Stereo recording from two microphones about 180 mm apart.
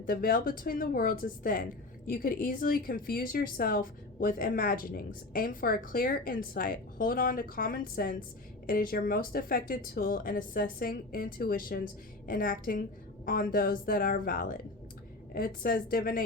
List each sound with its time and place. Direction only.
0.0 s a woman's voice: 50° left (ahead or behind)